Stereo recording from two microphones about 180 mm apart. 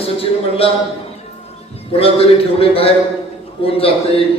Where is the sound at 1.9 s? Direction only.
30° left (ahead or behind).